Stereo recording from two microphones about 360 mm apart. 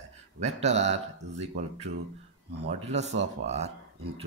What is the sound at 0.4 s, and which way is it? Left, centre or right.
Speech, centre.